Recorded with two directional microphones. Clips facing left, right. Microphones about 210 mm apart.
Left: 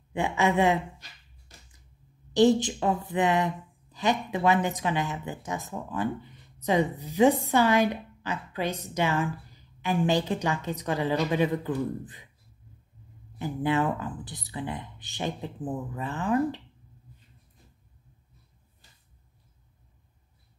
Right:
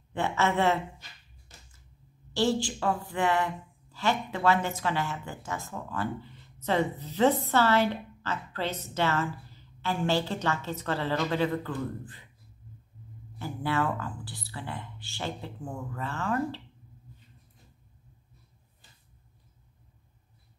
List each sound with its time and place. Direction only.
0.1 s a woman's voice: 15° left (ahead or behind)
2.3 s a woman's voice: 20° left (ahead or behind)
13.4 s a woman's voice: 15° left (ahead or behind)